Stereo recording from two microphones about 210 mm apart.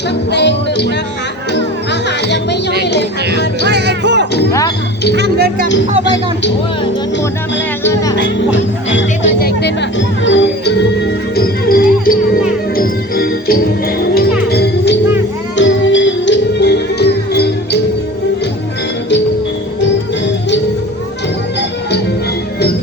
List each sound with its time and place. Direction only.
0.3 s music: 55° left (ahead or behind)
3.7 s music: 55° right (ahead or behind)
8.4 s speech: 60° left (ahead or behind)
10.2 s music: 60° left (ahead or behind)
15.5 s music: 60° left (ahead or behind)